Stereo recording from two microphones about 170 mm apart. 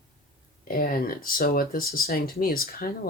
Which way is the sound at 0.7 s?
60° left (ahead or behind).